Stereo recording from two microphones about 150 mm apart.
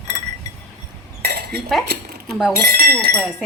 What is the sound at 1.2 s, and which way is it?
Cutlery, 90° right.